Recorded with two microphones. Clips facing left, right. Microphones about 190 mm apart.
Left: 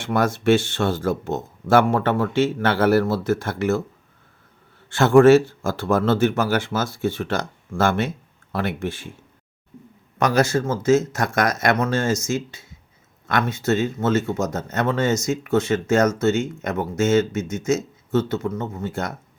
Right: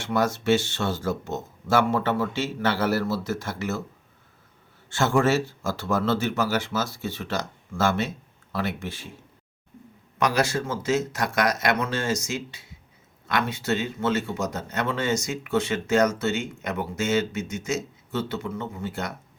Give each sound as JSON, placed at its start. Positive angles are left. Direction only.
{"t": 0.0, "sound": "speech", "side_deg": 55}
{"t": 4.9, "sound": "speech", "side_deg": 60}
{"t": 10.2, "sound": "speech", "side_deg": 45}